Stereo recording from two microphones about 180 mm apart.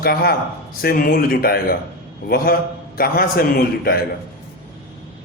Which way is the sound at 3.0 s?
55° left (ahead or behind).